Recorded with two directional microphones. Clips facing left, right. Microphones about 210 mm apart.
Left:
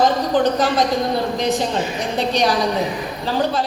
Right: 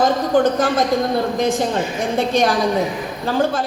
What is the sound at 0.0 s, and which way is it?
A woman's voice, 50° right (ahead or behind).